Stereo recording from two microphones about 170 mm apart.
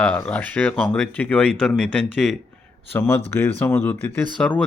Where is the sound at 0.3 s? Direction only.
10° left (ahead or behind).